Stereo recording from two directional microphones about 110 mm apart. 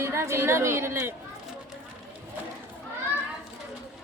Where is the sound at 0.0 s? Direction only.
25° right (ahead or behind).